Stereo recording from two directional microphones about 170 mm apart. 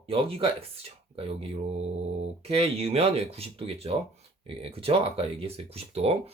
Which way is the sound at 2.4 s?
35° right (ahead or behind).